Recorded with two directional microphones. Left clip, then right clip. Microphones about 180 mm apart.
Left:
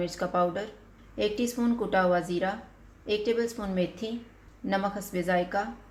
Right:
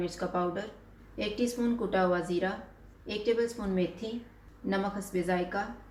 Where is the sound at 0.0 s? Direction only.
50° left (ahead or behind).